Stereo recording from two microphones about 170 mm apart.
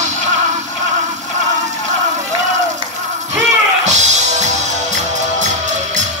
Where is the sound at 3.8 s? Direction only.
45° right (ahead or behind).